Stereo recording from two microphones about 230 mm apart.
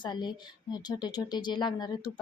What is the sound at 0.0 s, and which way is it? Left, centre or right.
A woman's voice, centre.